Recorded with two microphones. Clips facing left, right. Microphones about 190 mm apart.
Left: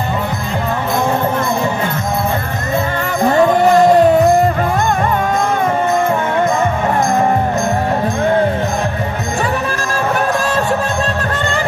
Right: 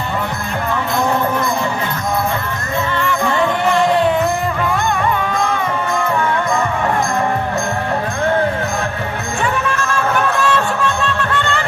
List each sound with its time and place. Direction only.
3.0 s music: 40° left (ahead or behind)
9.7 s music: 35° left (ahead or behind)